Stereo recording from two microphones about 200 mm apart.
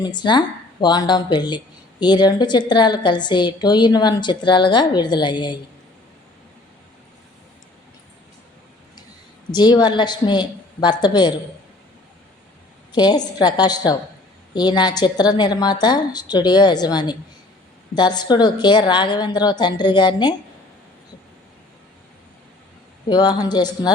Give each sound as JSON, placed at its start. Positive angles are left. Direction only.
{"t": 0.0, "sound": "speech", "side_deg": 20}
{"t": 9.5, "sound": "speech", "side_deg": 20}
{"t": 12.9, "sound": "speech", "side_deg": 20}
{"t": 23.0, "sound": "speech", "side_deg": 20}